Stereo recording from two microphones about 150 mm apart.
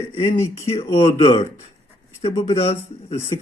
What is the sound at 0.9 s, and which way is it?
Speech, 30° left (ahead or behind).